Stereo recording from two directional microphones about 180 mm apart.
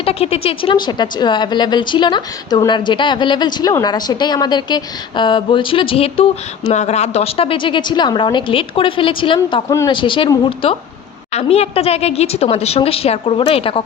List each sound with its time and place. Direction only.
0.0 s a woman's voice: 35° left (ahead or behind)